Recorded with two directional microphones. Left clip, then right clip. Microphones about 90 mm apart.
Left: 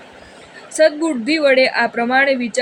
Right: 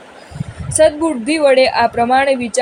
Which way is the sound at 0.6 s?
40° right (ahead or behind).